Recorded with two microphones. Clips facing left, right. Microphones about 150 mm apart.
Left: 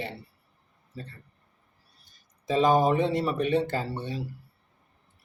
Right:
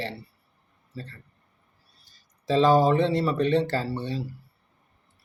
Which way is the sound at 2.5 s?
15° left (ahead or behind).